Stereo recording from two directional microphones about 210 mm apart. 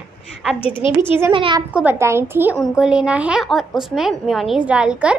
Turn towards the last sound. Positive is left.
turn(degrees=-5)  # may be behind; listen again after turning